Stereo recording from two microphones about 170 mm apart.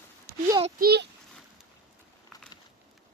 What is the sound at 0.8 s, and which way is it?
Speech, 65° right (ahead or behind).